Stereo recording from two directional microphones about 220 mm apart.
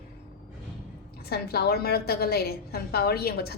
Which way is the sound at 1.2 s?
45° left (ahead or behind).